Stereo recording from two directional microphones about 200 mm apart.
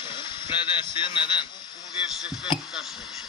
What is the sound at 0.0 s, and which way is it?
Speech, 25° left (ahead or behind).